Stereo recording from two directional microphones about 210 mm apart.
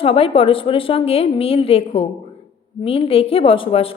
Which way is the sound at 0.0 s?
25° left (ahead or behind).